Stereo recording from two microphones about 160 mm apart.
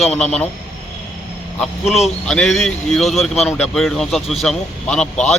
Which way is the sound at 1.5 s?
Centre (ahead or behind).